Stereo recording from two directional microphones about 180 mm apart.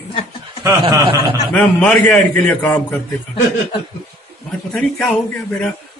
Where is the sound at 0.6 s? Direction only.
20° right (ahead or behind).